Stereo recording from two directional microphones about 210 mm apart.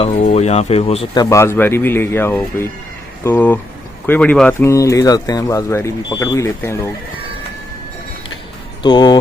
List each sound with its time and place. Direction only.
0.0 s speech: 30° left (ahead or behind); by 6.9 s 10° left (ahead or behind)
8.8 s speech: 20° left (ahead or behind)